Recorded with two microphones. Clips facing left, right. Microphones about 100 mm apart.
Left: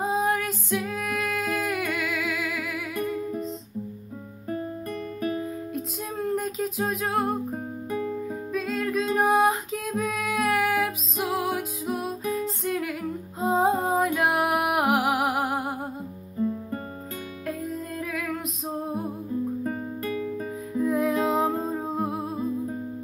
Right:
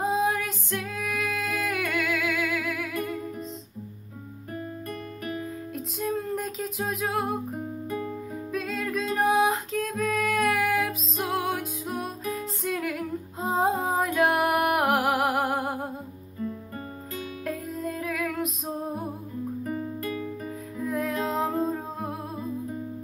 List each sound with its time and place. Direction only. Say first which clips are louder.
0.0 s female singing: left 1 dB; centre (ahead or behind)
3.1 s music: left 4 dB; centre (ahead or behind)
5.2 s music: left 6 dB; 30° left (ahead or behind)
5.7 s music: right 2 dB; centre (ahead or behind)
8.5 s music: left 2 dB; centre (ahead or behind)
16.3 s music: left 6 dB; 20° left (ahead or behind)
18.0 s music: right 2 dB; centre (ahead or behind)
19.6 s music: left 1 dB; 35° left (ahead or behind)
20.8 s music: left 5 dB; centre (ahead or behind)